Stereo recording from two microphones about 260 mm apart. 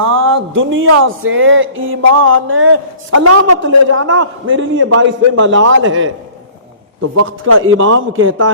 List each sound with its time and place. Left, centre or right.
0.0 s a sound: right
0.5 s speech: right
7.2 s speech: right
7.6 s speech: right